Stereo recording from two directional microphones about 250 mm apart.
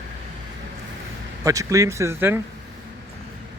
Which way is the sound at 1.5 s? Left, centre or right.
Centre.